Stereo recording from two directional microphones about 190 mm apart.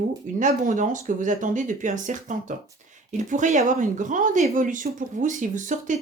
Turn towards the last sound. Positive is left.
turn(degrees=-40)  # may be behind; listen again after turning